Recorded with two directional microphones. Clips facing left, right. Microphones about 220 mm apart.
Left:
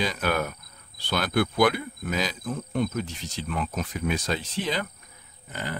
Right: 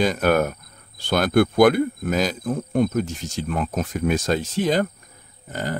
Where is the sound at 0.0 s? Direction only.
50° right (ahead or behind).